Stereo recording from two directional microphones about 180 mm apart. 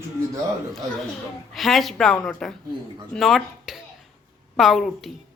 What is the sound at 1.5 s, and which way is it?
A man's voice, centre (ahead or behind).